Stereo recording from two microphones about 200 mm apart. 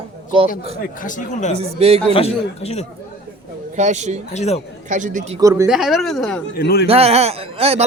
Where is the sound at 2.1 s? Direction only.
30° left (ahead or behind).